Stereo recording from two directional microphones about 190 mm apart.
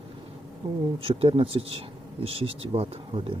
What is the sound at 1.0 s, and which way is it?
Speech, 30° right (ahead or behind).